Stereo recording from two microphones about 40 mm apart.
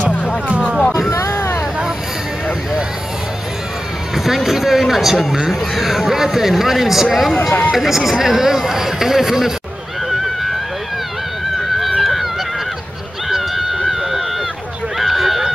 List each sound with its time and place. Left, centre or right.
0.5 s music: right
1.1 s vehicle: left
4.1 s speech: centre
10.0 s vehicle: centre
11.8 s run: centre
13.3 s a sound: centre
15.0 s run: centre